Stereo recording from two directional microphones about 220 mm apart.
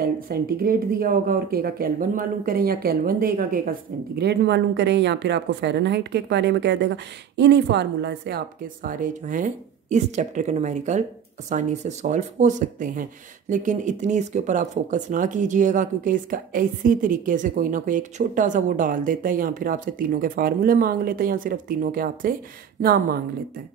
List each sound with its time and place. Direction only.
0.0 s speech: 45° right (ahead or behind)